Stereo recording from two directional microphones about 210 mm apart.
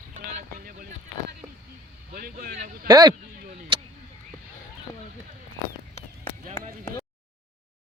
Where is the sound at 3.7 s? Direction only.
25° right (ahead or behind).